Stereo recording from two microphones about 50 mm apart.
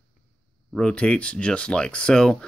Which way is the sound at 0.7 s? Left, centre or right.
Left.